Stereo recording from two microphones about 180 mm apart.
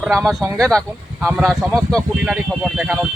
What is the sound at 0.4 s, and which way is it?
Speech, 15° right (ahead or behind).